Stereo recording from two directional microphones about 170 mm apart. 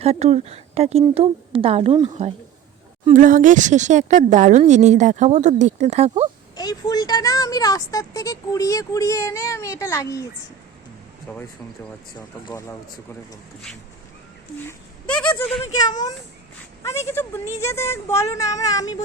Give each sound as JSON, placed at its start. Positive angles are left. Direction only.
{"t": 0.0, "sound": "speech", "side_deg": -40}
{"t": 3.1, "sound": "speech", "side_deg": -50}
{"t": 6.6, "sound": "speech", "side_deg": 25}
{"t": 11.3, "sound": "speech", "side_deg": 10}
{"t": 12.5, "sound": "speech", "side_deg": 15}
{"t": 14.7, "sound": "speech", "side_deg": 5}
{"t": 15.6, "sound": "speech", "side_deg": 20}